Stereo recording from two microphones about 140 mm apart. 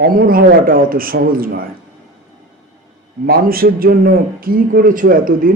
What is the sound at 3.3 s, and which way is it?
A man's voice, 90° right.